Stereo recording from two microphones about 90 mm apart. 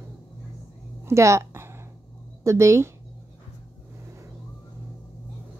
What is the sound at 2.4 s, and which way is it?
Speech, 35° right (ahead or behind).